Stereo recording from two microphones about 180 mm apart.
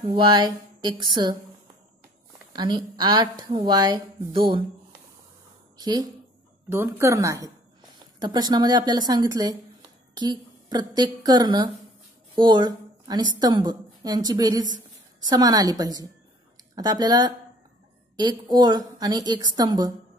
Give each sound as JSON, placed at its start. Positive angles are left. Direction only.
{"t": 0.0, "sound": "a woman's voice", "side_deg": -25}
{"t": 2.5, "sound": "a woman's voice", "side_deg": -25}
{"t": 5.8, "sound": "a woman's voice", "side_deg": -20}